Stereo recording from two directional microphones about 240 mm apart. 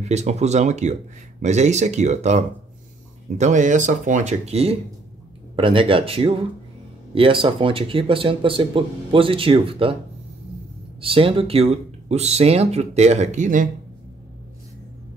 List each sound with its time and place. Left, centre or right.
0.0 s speech: right
11.0 s speech: right